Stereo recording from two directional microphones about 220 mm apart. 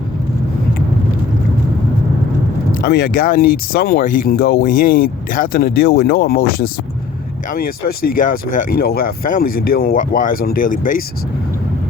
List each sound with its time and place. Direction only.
2.8 s speech: 45° left (ahead or behind)